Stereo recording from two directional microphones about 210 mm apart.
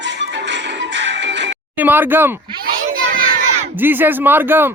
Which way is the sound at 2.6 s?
45° right (ahead or behind).